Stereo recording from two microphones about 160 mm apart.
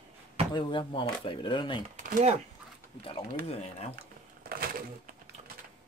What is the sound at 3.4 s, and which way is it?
Speech, 40° left (ahead or behind).